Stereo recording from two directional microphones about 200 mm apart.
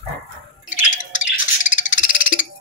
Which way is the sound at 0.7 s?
40° left (ahead or behind).